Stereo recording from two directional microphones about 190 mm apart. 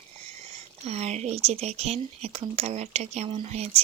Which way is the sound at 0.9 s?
35° right (ahead or behind).